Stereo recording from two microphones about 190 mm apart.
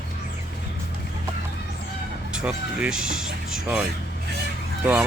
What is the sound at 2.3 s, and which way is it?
Speech, 5° right (ahead or behind).